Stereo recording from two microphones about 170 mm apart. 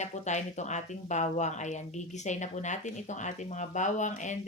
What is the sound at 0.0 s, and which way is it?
A woman's voice, 45° left (ahead or behind).